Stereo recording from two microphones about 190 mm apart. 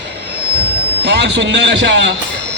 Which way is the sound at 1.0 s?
65° right (ahead or behind).